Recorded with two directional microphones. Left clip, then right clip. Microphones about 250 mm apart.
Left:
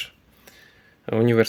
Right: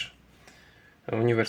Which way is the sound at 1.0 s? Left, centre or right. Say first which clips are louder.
Left 6 dB; left.